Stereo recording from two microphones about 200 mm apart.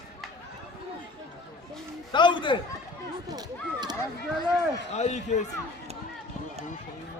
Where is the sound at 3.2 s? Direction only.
20° right (ahead or behind).